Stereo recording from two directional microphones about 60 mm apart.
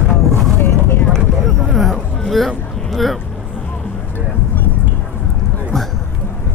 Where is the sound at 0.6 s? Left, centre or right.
Left.